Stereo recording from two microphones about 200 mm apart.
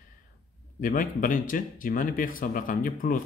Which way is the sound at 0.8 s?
45° left (ahead or behind).